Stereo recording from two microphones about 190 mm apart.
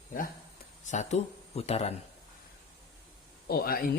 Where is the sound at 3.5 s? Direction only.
55° left (ahead or behind).